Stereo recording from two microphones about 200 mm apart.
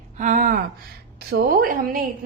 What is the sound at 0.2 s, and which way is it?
A woman's voice, 40° right (ahead or behind).